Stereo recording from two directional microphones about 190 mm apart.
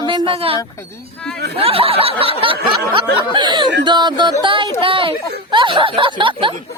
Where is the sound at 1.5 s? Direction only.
30° right (ahead or behind).